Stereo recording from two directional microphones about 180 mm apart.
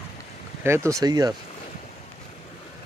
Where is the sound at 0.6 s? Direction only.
15° right (ahead or behind).